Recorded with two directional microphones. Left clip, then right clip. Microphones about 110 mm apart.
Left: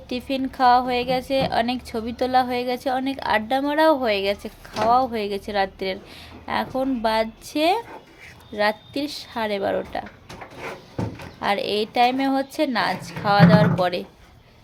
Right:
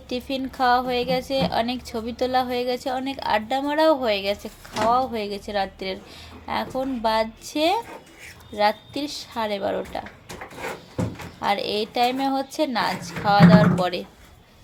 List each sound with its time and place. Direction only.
0.1 s a woman's voice: 30° left (ahead or behind)
11.3 s a woman's voice: 30° left (ahead or behind)